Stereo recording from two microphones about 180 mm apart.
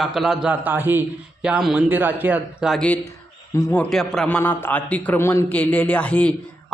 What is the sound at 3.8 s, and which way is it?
A man's voice, centre (ahead or behind).